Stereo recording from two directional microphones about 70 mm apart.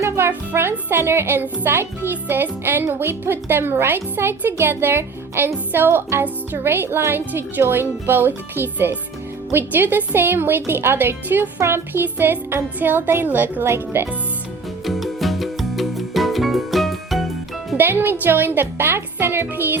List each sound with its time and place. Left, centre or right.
0.3 s a child's voice: right
14.8 s music: centre
17.7 s a child's voice: right